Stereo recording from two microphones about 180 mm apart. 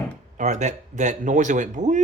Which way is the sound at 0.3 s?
40° right (ahead or behind).